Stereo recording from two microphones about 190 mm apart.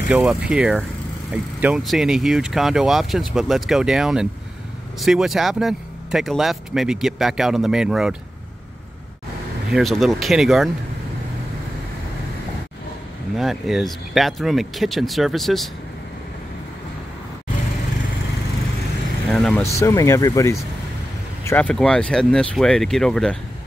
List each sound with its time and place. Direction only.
0.1 s speech: 5° right (ahead or behind)
9.7 s speech: centre (ahead or behind)
13.4 s speech: centre (ahead or behind)
19.2 s speech: 5° left (ahead or behind)
19.6 s speech: 15° left (ahead or behind)
21.5 s speech: 5° left (ahead or behind)